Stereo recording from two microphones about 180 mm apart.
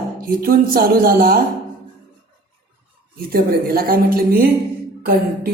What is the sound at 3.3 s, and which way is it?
A woman's voice, 55° right (ahead or behind).